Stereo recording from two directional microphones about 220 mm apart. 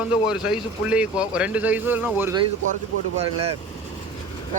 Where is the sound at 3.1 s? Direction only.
25° right (ahead or behind).